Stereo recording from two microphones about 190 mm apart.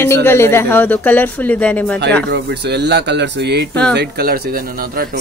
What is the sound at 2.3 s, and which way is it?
Speech, 60° right (ahead or behind).